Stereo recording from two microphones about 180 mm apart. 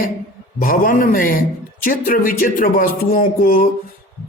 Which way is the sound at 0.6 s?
50° left (ahead or behind).